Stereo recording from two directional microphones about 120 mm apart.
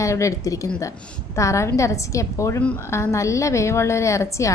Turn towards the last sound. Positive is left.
turn(degrees=25)  # may be behind; listen again after turning